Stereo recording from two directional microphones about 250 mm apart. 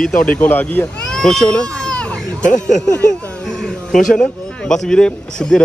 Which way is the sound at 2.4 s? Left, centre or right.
Left.